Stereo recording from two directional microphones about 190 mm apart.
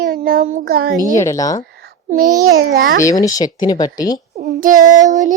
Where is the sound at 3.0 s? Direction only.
20° left (ahead or behind).